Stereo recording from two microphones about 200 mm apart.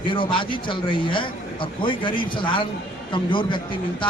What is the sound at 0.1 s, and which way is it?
A man's voice, 25° left (ahead or behind).